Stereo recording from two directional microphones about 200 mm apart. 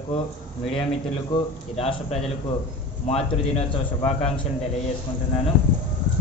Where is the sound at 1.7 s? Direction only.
30° left (ahead or behind).